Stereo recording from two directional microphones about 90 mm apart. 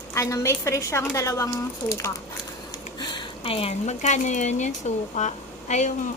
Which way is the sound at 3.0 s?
65° left (ahead or behind).